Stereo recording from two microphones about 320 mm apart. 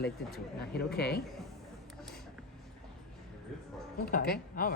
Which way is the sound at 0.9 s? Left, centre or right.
Left.